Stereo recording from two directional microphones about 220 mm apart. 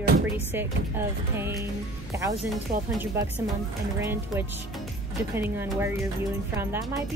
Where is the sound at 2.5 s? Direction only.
Centre (ahead or behind).